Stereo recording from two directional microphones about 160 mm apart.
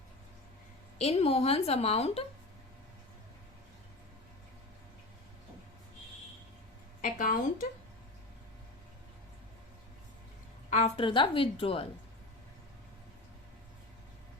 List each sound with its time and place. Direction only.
0.9 s a woman's voice: 40° left (ahead or behind)
7.0 s a sound: 55° left (ahead or behind)
10.7 s a woman's voice: 45° left (ahead or behind)